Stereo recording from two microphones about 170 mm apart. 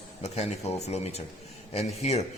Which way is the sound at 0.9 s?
40° left (ahead or behind).